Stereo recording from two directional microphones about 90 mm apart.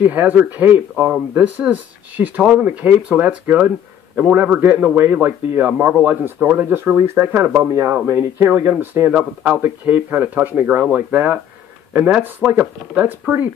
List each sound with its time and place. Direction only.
0.0 s speech: 20° right (ahead or behind)
9.1 s speech: 15° right (ahead or behind)